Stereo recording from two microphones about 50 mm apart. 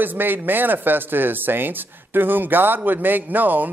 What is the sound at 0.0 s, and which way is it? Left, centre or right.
A woman's voice, right.